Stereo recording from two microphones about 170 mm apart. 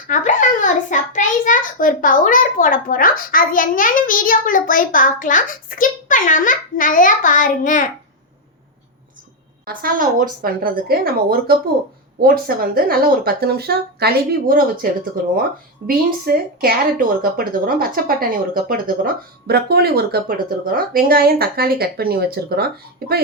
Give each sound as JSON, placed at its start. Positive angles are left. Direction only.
{"t": 0.1, "sound": "a child's voice", "side_deg": 50}
{"t": 9.6, "sound": "speech", "side_deg": -60}
{"t": 15.9, "sound": "speech", "side_deg": -60}